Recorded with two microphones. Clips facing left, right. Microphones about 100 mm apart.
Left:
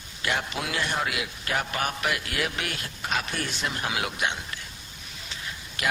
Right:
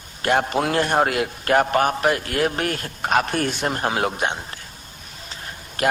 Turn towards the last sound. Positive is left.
turn(degrees=-45)  # may be behind; listen again after turning